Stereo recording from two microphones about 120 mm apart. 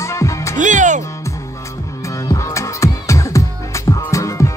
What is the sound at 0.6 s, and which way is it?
Music, 90° right.